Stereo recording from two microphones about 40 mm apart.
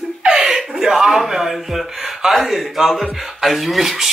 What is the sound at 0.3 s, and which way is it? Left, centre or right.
Gasp, centre.